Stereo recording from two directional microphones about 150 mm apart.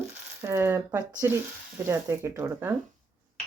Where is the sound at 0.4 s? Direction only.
20° right (ahead or behind).